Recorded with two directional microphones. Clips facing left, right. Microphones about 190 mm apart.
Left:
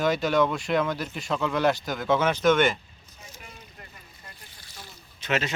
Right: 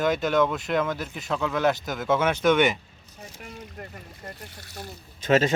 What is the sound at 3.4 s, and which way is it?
Boat, 45° right (ahead or behind).